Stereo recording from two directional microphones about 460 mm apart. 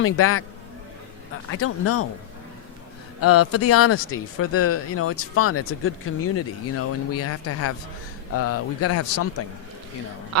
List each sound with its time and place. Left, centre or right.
0.0 s speech: left
1.5 s speech: left
3.2 s speech: left